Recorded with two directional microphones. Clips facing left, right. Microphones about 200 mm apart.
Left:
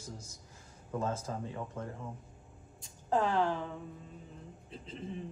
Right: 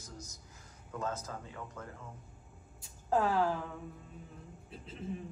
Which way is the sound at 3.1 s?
5° right (ahead or behind).